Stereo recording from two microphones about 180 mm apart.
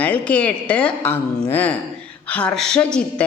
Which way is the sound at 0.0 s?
5° left (ahead or behind).